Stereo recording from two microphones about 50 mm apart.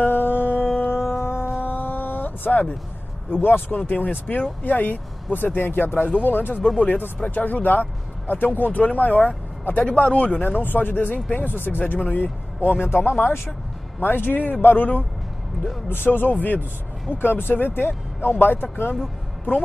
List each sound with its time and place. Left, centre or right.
0.0 s music: left
0.9 s music: left
1.6 s a sound: left
3.3 s speech: left
10.6 s speech: left
17.2 s speech: left